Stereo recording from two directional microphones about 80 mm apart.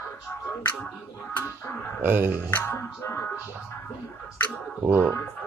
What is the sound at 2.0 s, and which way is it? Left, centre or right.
Speech, right.